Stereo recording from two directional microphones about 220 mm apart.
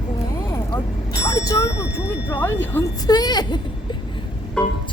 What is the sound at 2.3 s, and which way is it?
Speech, 10° left (ahead or behind).